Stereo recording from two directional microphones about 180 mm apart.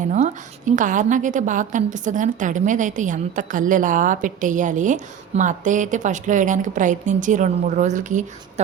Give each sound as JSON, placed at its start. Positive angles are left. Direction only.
{"t": 0.0, "sound": "a woman's voice", "side_deg": -45}